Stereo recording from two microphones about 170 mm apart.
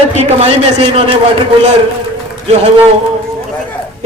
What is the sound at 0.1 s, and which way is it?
Speech, 40° right (ahead or behind).